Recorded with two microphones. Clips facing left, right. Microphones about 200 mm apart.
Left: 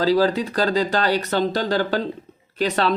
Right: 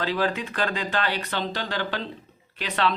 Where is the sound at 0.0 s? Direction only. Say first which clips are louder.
Left 8 dB; 35° left (ahead or behind).